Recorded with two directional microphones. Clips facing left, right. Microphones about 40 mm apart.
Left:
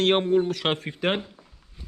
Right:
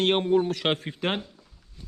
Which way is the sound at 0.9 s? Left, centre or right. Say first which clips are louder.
Left 3 dB; centre.